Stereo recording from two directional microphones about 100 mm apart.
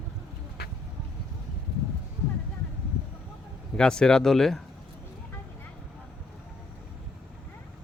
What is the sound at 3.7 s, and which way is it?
Speech, 5° left (ahead or behind).